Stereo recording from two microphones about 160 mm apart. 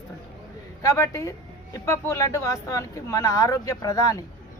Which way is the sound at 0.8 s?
20° left (ahead or behind).